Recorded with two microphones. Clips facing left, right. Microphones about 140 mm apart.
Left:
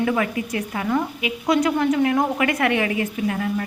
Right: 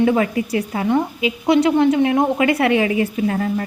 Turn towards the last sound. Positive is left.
turn(degrees=-35)  # may be behind; listen again after turning